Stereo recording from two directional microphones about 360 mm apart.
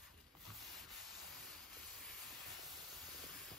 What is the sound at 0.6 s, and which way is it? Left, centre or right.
Sanding, centre.